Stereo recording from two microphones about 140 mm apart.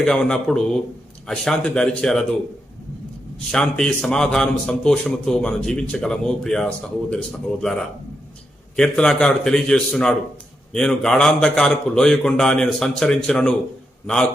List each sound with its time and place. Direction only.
0.0 s a man's voice: 5° left (ahead or behind)
3.5 s a man's voice: 5° left (ahead or behind)